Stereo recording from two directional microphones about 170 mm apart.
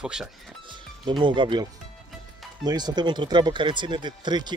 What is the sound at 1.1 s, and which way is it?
Speech, 30° right (ahead or behind).